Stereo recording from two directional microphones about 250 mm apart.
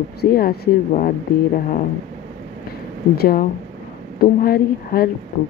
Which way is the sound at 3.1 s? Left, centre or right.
Left.